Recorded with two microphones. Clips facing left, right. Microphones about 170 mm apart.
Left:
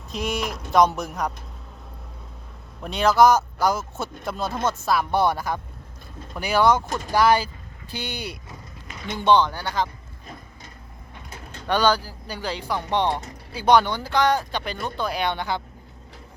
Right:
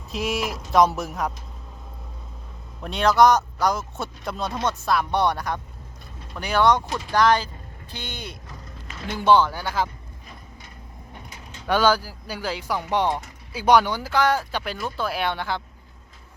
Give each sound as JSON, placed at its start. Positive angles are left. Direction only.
{"t": 0.1, "sound": "speech", "side_deg": 0}
{"t": 2.8, "sound": "speech", "side_deg": 0}
{"t": 6.8, "sound": "speech", "side_deg": 50}
{"t": 7.1, "sound": "speech", "side_deg": 10}
{"t": 9.0, "sound": "speech", "side_deg": -5}
{"t": 11.6, "sound": "speech", "side_deg": -5}